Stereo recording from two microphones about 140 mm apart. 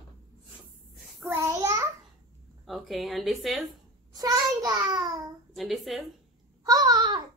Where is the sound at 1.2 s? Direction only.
20° right (ahead or behind).